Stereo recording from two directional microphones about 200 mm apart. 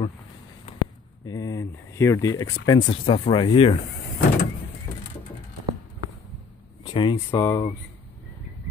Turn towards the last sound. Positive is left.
turn(degrees=20)  # may be behind; listen again after turning